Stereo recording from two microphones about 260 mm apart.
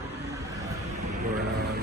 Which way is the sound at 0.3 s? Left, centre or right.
Centre.